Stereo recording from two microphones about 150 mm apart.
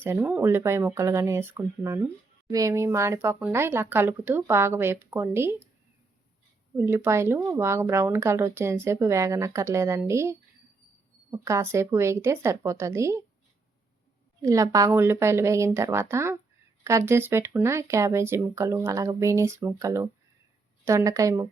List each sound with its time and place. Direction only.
0.0 s speech: 15° right (ahead or behind)
6.7 s speech: 15° right (ahead or behind)
14.4 s speech: 20° right (ahead or behind)